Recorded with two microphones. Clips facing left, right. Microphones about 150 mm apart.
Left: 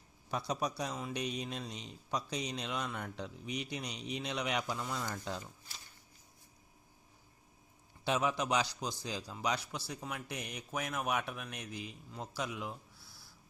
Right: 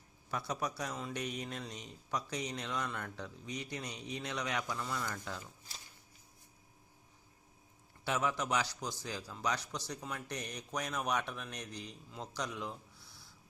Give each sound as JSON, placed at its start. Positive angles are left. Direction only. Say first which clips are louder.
{"t": 0.3, "sound": "speech", "louder": "left 2 dB", "side_deg": 15}
{"t": 8.0, "sound": "speech", "louder": "left 2 dB", "side_deg": 20}